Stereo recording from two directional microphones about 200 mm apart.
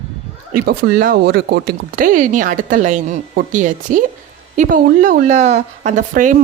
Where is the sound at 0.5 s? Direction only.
45° right (ahead or behind).